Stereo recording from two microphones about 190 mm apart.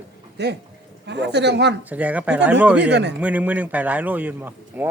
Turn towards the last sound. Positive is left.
turn(degrees=-10)  # may be behind; listen again after turning